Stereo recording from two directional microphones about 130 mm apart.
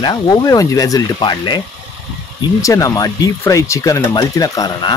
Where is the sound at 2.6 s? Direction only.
25° left (ahead or behind).